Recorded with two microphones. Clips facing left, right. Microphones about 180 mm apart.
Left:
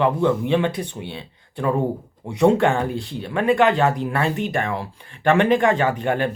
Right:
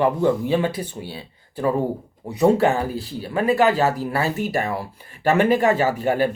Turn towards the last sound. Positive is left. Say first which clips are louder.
# right 1 dB
turn(degrees=-5)  # may be behind; listen again after turning